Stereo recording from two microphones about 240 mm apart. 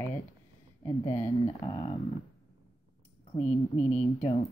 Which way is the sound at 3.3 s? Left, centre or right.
Left.